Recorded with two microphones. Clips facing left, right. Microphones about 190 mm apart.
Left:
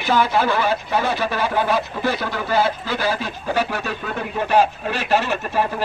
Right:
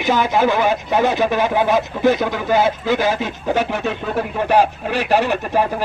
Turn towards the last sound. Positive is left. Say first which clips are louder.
# right 3 dB
turn(degrees=-15)  # may be behind; listen again after turning